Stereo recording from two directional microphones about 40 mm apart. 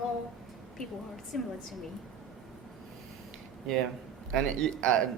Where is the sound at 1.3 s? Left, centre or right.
Centre.